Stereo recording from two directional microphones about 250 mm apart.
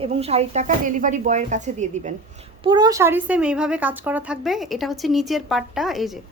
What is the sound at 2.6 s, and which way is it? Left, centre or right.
A woman's voice, centre.